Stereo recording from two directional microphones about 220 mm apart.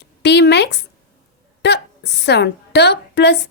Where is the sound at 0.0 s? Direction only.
50° left (ahead or behind).